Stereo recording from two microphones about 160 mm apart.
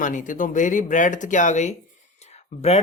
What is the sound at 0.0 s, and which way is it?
Speech, 55° left (ahead or behind).